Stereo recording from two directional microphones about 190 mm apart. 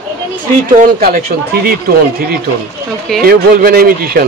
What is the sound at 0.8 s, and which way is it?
Speech, 45° right (ahead or behind).